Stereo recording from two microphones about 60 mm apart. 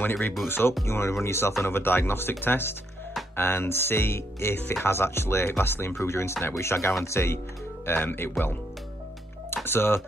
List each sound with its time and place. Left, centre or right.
0.0 s speech: left
4.6 s speech: left
4.8 s speech: left
9.7 s speech: left